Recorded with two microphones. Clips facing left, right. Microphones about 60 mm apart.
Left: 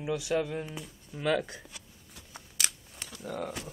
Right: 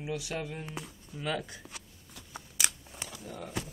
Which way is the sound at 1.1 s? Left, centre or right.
Left.